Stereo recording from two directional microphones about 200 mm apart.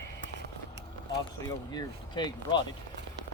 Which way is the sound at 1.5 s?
20° left (ahead or behind).